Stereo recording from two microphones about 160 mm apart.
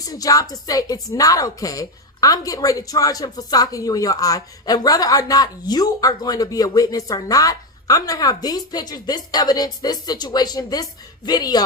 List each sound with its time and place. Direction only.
0.0 s a woman's voice: 20° left (ahead or behind)